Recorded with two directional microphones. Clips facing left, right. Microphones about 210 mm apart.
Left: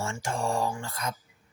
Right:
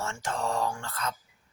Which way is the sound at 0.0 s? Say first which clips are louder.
Left 1 dB; 10° left (ahead or behind).